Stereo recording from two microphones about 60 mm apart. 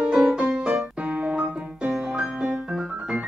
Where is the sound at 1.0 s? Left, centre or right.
Right.